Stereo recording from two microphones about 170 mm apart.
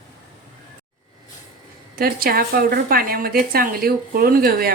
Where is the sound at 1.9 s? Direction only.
60° right (ahead or behind).